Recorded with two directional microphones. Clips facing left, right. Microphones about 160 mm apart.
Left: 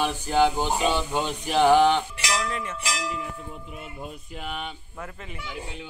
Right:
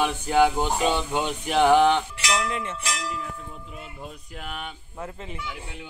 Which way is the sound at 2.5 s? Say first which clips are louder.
Right 1 dB; 25° right (ahead or behind).